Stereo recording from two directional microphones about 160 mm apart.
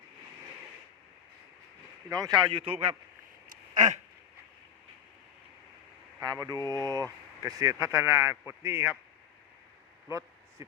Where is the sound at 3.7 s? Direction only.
50° right (ahead or behind).